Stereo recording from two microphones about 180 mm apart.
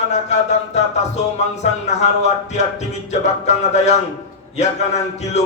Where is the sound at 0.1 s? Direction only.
40° left (ahead or behind).